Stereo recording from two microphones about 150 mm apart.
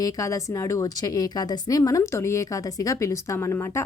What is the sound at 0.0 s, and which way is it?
A woman's voice, 20° left (ahead or behind).